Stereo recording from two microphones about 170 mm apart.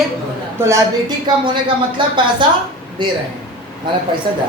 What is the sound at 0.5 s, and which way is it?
Speech, 15° right (ahead or behind).